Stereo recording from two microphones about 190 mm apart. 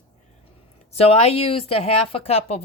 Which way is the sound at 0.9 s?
30° left (ahead or behind).